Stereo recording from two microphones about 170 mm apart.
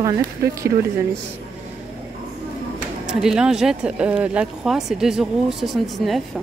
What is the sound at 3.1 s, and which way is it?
Speech, 5° right (ahead or behind).